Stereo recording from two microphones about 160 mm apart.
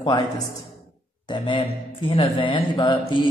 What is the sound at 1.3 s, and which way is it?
Speech, 30° left (ahead or behind).